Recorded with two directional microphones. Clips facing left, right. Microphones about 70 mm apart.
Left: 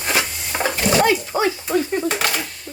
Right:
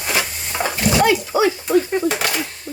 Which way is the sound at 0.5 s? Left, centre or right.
Left.